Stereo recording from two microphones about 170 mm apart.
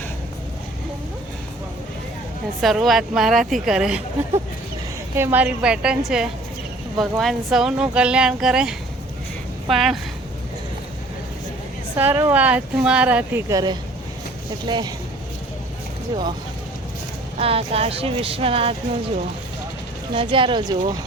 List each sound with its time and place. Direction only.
2.6 s speech: centre (ahead or behind)
5.1 s speech: 10° right (ahead or behind)
11.9 s speech: 10° right (ahead or behind)
13.5 s speech: 20° right (ahead or behind)
17.3 s speech: 35° right (ahead or behind)